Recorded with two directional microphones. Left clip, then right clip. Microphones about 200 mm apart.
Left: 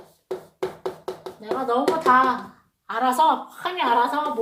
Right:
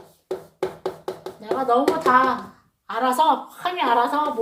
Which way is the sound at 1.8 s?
5° left (ahead or behind).